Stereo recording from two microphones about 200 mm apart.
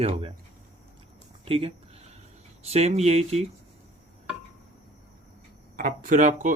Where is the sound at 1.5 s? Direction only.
30° right (ahead or behind).